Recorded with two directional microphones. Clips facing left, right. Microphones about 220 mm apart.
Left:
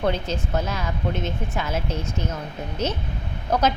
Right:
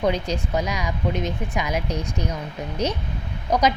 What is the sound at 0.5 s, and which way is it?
A woman's voice, 15° right (ahead or behind).